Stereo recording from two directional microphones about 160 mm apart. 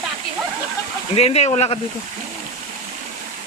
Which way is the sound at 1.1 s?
40° left (ahead or behind).